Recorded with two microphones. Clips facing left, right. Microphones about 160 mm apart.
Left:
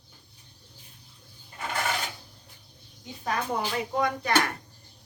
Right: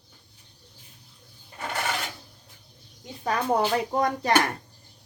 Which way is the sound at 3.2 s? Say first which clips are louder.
Right 5 dB; 40° right (ahead or behind).